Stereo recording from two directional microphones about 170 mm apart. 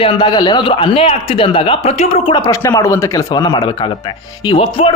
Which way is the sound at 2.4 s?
20° left (ahead or behind).